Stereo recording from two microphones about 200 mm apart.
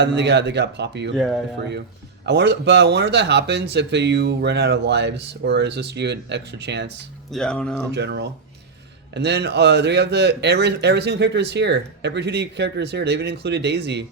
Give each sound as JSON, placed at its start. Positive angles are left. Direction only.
{"t": 0.0, "sound": "speech", "side_deg": -60}
{"t": 2.2, "sound": "speech", "side_deg": -60}
{"t": 7.3, "sound": "speech", "side_deg": 5}
{"t": 7.9, "sound": "speech", "side_deg": -60}